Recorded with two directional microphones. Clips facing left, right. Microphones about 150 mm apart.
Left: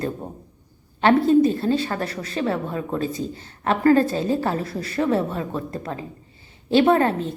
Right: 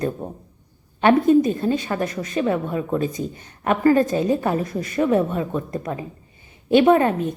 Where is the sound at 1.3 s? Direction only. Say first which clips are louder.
Even; 15° right (ahead or behind).